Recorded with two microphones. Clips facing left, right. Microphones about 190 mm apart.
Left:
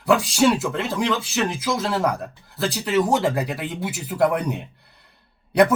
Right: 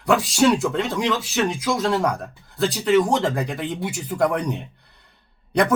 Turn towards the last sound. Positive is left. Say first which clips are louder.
# left 3 dB
turn(degrees=5)  # may be behind; listen again after turning